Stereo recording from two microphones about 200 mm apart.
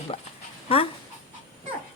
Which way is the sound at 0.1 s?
30° left (ahead or behind).